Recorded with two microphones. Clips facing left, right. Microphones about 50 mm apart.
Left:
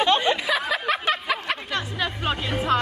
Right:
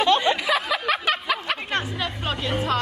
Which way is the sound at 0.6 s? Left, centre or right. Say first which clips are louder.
Right 1 dB; centre.